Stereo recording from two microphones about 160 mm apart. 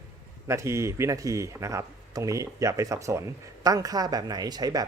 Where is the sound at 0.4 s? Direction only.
20° right (ahead or behind).